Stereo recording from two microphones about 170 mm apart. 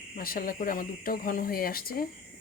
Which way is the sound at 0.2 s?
55° left (ahead or behind).